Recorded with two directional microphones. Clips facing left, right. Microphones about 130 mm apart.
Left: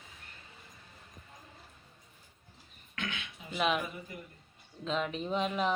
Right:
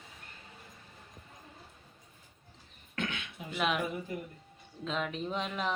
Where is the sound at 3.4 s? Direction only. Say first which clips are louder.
Right 3 dB; 55° right (ahead or behind).